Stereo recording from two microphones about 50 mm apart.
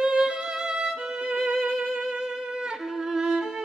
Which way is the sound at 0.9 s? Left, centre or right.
Centre.